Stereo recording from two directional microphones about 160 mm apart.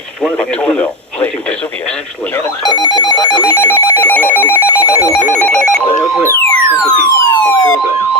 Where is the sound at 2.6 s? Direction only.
25° left (ahead or behind).